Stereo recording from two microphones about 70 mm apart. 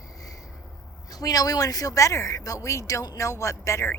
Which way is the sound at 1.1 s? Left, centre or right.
Left.